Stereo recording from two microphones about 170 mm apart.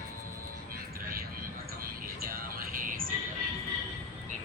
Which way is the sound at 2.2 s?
55° right (ahead or behind).